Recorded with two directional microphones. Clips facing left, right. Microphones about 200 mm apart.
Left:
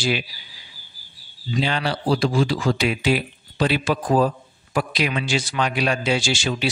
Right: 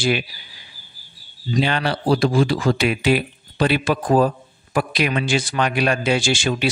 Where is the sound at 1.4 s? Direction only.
50° right (ahead or behind).